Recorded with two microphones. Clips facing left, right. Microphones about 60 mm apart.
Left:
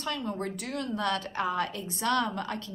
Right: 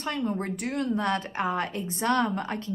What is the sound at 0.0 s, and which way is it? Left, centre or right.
A woman's voice, right.